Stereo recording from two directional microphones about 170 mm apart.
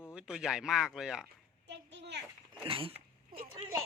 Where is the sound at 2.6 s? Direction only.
30° right (ahead or behind).